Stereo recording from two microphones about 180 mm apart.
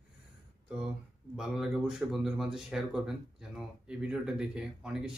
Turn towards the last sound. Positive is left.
turn(degrees=-5)  # may be behind; listen again after turning